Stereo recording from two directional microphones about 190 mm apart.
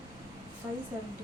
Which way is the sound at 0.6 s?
25° right (ahead or behind).